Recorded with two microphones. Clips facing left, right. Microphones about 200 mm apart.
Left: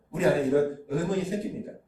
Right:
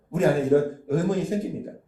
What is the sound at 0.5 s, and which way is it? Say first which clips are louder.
Speech: right 5 dB; 45° right (ahead or behind).